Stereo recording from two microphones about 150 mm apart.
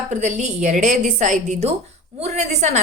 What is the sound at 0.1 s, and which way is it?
A woman's voice, 50° right (ahead or behind).